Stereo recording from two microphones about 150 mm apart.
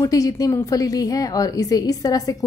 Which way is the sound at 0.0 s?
25° left (ahead or behind).